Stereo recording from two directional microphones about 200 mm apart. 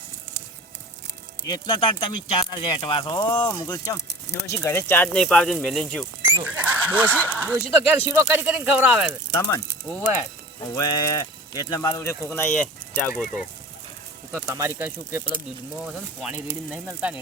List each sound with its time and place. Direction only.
1.5 s speech: 20° left (ahead or behind); by 6.1 s 5° left (ahead or behind)
6.4 s speech: 10° right (ahead or behind)
9.3 s speech: 15° left (ahead or behind)
14.3 s speech: 15° right (ahead or behind)